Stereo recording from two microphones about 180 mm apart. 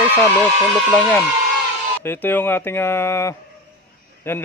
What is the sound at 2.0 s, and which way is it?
Speech, 10° left (ahead or behind).